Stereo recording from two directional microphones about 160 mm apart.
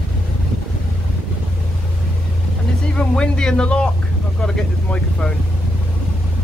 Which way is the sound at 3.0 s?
5° left (ahead or behind).